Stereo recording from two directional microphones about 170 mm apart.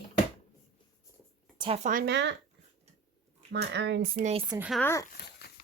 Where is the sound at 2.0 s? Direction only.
90° right.